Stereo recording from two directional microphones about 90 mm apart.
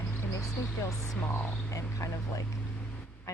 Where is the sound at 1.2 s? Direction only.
20° left (ahead or behind).